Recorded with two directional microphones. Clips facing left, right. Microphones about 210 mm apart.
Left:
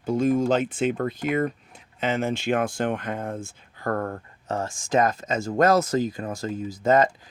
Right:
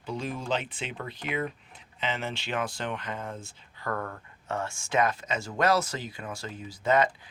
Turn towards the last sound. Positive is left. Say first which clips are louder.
# left 5 dB
turn(degrees=45)  # may be behind; listen again after turning